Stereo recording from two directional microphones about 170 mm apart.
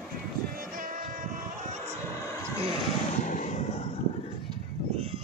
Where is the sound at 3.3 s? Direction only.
45° left (ahead or behind).